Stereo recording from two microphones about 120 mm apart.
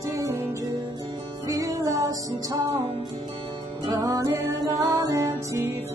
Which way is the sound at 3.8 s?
30° right (ahead or behind).